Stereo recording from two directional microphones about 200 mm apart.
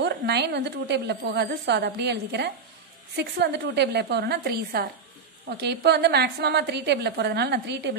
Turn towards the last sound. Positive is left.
turn(degrees=-55)  # may be behind; listen again after turning